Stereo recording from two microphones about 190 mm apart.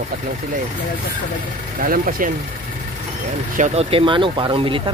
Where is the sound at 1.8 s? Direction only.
50° right (ahead or behind).